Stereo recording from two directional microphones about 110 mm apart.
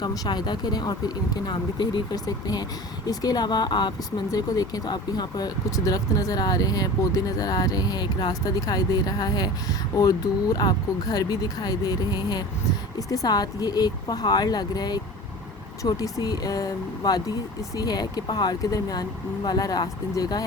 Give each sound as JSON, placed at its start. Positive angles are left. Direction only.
{"t": 0.0, "sound": "speech", "side_deg": 40}